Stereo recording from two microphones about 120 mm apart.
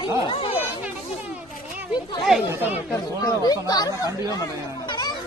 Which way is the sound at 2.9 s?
30° left (ahead or behind).